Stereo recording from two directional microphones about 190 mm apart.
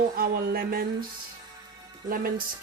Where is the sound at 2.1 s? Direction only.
50° right (ahead or behind).